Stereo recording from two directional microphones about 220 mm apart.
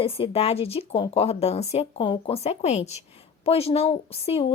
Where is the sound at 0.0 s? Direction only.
25° left (ahead or behind).